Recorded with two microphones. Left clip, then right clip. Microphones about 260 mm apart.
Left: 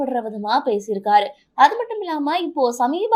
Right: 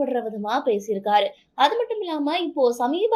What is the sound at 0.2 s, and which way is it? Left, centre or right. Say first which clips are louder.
Speech: left 4 dB; left.